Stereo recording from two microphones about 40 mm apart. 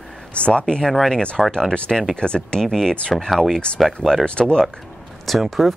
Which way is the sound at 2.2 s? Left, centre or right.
Left.